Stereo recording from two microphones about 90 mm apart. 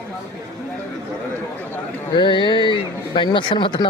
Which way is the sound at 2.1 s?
60° left (ahead or behind).